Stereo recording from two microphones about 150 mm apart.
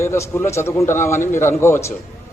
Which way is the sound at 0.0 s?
20° left (ahead or behind).